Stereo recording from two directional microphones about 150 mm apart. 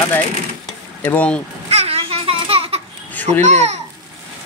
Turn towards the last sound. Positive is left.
turn(degrees=-50)  # may be behind; listen again after turning